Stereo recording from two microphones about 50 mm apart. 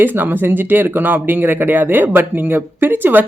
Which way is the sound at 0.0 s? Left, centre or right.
Right.